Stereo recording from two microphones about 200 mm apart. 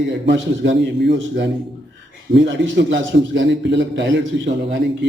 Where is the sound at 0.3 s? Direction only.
65° right (ahead or behind).